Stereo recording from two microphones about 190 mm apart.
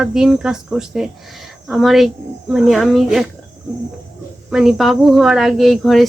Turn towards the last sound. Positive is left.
turn(degrees=0)  # may be behind; listen again after turning